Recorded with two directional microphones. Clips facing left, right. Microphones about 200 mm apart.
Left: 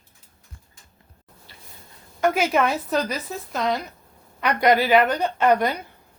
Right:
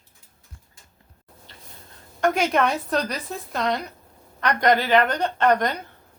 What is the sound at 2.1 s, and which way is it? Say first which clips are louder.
A woman's voice: even; 5° left (ahead or behind).